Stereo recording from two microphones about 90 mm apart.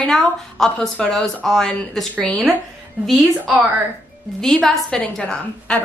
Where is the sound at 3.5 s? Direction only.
20° right (ahead or behind).